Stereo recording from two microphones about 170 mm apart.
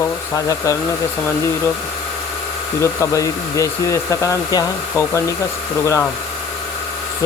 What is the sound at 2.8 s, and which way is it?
Speech, 20° left (ahead or behind).